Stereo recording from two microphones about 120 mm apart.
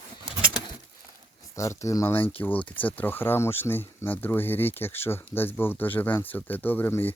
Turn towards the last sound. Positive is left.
turn(degrees=15)  # may be behind; listen again after turning